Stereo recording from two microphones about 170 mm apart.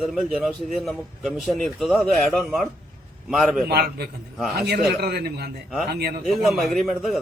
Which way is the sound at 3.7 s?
70° right (ahead or behind).